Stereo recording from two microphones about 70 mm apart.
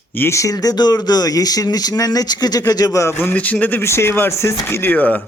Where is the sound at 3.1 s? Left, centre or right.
Left.